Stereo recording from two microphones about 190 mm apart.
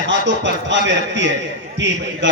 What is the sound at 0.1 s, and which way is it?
A man's voice, 70° right (ahead or behind).